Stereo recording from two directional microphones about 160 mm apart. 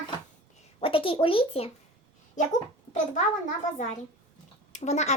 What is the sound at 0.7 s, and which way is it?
Speech, 35° left (ahead or behind).